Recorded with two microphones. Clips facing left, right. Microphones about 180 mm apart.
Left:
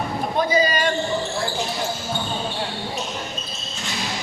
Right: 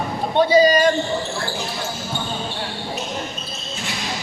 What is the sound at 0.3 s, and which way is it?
Speech, 35° right (ahead or behind).